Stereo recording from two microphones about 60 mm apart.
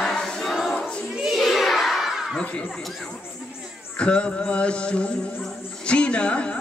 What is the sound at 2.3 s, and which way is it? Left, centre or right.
Chatter, centre.